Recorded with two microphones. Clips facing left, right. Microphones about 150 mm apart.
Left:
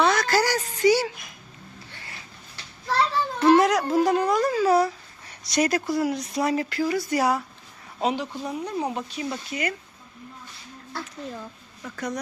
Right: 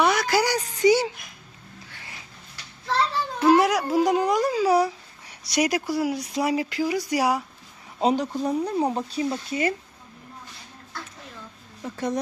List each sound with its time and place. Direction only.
0.0 s a woman's voice: 10° right (ahead or behind)
3.4 s speech: 10° right (ahead or behind)
8.0 s speech: 40° right (ahead or behind)
11.8 s speech: 25° right (ahead or behind)